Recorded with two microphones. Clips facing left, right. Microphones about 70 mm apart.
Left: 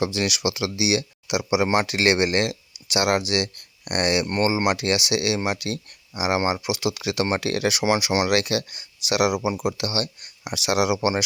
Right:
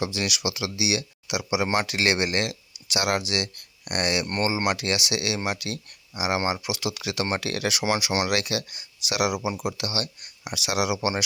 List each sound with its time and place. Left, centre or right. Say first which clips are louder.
0.2 s speech: left 4 dB; left
8.3 s speech: left 4 dB; left